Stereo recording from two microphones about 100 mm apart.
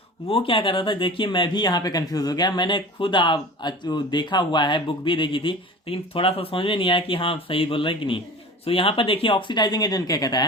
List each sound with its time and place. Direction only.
0.3 s speech: 65° left (ahead or behind); by 10.4 s 40° left (ahead or behind)